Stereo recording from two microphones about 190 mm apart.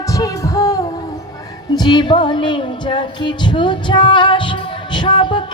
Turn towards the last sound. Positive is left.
turn(degrees=25)  # may be behind; listen again after turning